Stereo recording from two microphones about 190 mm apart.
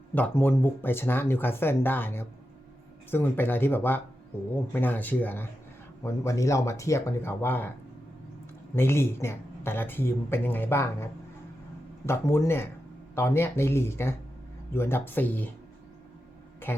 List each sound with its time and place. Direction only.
0.1 s speech: 10° left (ahead or behind)
8.7 s speech: 10° left (ahead or behind)
16.7 s speech: 10° left (ahead or behind)